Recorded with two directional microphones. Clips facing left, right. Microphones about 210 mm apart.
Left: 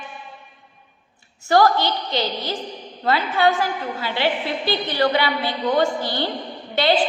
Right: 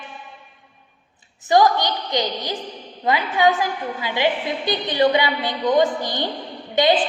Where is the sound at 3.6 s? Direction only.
15° right (ahead or behind).